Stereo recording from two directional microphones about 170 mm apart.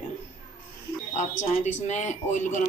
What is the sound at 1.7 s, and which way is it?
Speech, 45° left (ahead or behind).